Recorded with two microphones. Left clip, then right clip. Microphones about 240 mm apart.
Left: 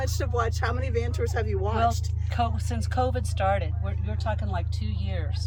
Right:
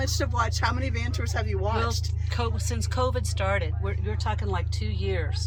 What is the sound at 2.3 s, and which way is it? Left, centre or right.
Speech, centre.